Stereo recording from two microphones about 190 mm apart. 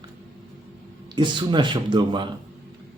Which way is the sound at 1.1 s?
25° right (ahead or behind).